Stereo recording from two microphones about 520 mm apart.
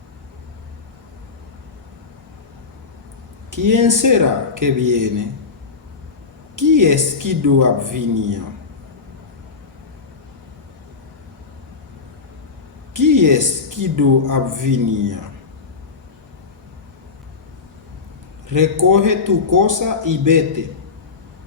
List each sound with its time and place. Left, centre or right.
3.5 s a woman's voice: right
6.6 s a woman's voice: right
12.9 s a woman's voice: right
18.4 s a woman's voice: right